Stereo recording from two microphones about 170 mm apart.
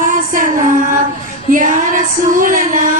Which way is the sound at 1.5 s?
50° right (ahead or behind).